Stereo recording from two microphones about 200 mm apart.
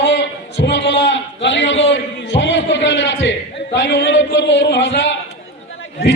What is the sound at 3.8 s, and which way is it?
A man's voice, 65° left (ahead or behind).